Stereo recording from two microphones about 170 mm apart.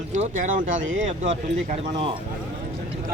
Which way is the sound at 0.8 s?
90° right.